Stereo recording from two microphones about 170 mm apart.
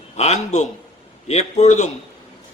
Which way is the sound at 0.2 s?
40° left (ahead or behind).